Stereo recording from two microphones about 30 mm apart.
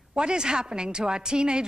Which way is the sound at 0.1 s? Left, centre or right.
Right.